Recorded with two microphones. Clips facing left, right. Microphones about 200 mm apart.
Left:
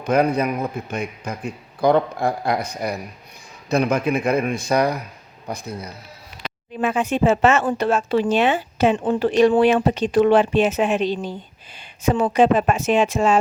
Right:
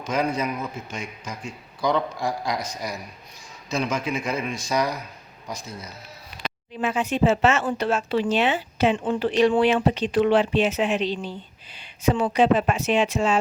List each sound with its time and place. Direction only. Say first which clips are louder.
0.0 s a man's voice: left 6 dB; 60° left (ahead or behind)